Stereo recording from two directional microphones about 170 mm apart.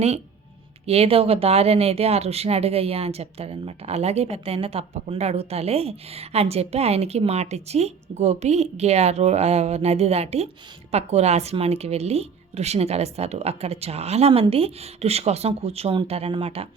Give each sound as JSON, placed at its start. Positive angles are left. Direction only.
{"t": 0.9, "sound": "speech", "side_deg": -35}